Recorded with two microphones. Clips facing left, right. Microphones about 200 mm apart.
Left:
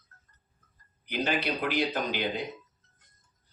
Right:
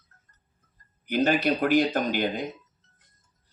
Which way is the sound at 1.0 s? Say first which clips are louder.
Right 7 dB; 45° right (ahead or behind).